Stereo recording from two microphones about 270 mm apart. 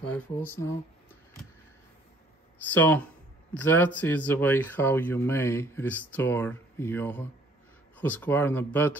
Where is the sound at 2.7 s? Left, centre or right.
Centre.